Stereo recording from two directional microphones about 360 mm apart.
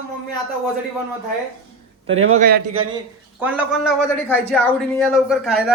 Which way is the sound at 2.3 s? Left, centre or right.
Right.